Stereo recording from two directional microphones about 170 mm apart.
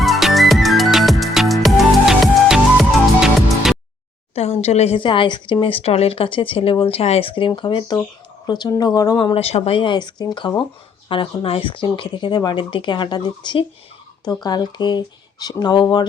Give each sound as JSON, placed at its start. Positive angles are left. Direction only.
{"t": 0.0, "sound": "music", "side_deg": 0}
{"t": 4.4, "sound": "a woman's voice", "side_deg": 40}